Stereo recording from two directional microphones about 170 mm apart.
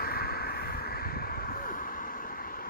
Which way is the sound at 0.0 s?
65° left (ahead or behind).